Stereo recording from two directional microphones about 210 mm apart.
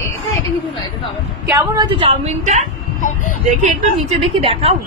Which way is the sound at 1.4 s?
15° right (ahead or behind).